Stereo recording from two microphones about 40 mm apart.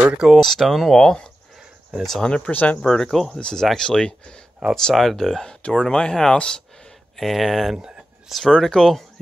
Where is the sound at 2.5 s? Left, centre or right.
Left.